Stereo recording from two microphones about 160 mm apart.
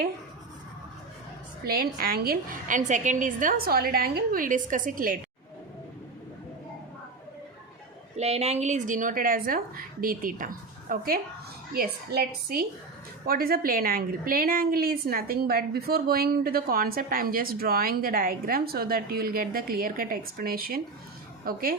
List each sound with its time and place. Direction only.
1.6 s a woman's voice: 70° right (ahead or behind)
8.1 s a woman's voice: 40° right (ahead or behind); by 21.8 s 65° right (ahead or behind)